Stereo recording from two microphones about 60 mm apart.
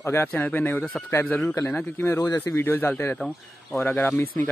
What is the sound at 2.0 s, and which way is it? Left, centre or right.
Speech, left.